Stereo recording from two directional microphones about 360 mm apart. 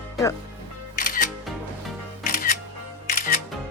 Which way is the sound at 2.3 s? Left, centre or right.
Left.